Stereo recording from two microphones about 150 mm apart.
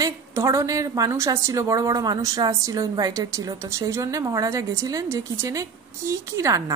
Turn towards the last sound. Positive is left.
turn(degrees=-20)  # may be behind; listen again after turning